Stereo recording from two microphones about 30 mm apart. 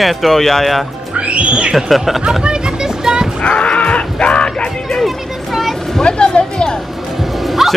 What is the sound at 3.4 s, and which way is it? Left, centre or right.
Livestock, left.